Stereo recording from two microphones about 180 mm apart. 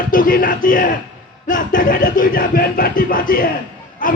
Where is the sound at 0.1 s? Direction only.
50° left (ahead or behind).